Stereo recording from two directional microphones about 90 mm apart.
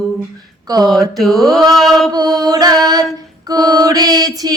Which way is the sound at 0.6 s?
50° right (ahead or behind).